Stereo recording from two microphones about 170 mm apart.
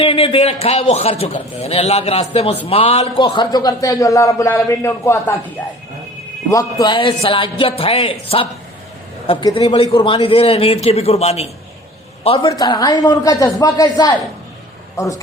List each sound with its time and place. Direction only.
0.0 s a man's voice: 35° left (ahead or behind)
3.2 s a man's voice: 25° left (ahead or behind)
6.5 s a man's voice: 20° left (ahead or behind)